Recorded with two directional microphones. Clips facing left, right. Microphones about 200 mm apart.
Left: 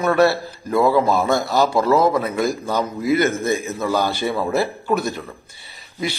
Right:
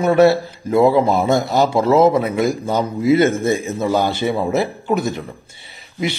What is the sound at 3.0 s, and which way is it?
A man's voice, 30° right (ahead or behind).